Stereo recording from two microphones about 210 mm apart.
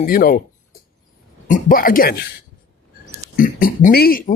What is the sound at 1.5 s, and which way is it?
Speech, 40° left (ahead or behind).